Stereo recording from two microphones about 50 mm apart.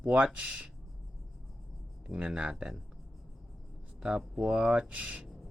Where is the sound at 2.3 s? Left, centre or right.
Centre.